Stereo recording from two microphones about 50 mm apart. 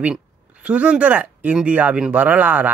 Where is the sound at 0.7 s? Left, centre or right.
Right.